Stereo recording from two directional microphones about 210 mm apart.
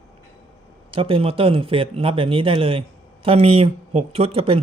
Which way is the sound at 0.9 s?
25° right (ahead or behind).